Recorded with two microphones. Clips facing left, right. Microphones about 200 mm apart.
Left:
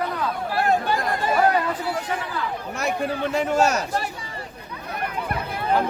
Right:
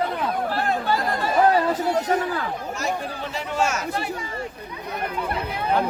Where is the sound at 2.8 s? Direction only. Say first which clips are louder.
Left 6 dB; 60° left (ahead or behind); by 4.0 s 40° left (ahead or behind).